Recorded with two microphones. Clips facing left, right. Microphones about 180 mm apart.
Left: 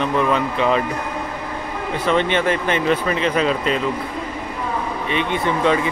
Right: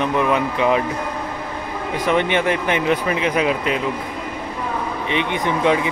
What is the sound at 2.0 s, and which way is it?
Speech, 15° right (ahead or behind).